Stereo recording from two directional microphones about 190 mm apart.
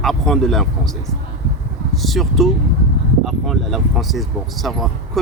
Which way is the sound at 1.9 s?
Centre (ahead or behind).